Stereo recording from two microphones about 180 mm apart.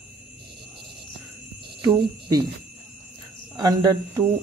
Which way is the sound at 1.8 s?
25° right (ahead or behind).